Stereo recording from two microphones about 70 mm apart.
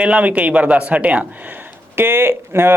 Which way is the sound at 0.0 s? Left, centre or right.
Centre.